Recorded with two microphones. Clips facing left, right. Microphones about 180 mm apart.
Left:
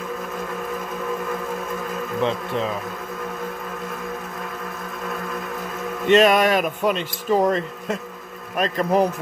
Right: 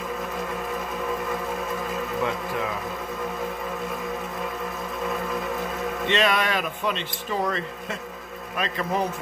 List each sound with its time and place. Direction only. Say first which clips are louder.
2.2 s speech: left 7 dB; 25° left (ahead or behind)
6.0 s speech: left 9 dB; 45° left (ahead or behind)